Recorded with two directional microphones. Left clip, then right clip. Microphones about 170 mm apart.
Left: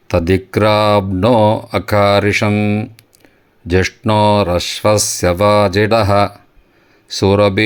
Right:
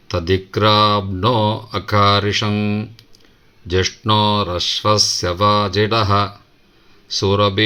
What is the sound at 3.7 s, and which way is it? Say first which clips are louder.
Speech: left 3 dB; 50° left (ahead or behind).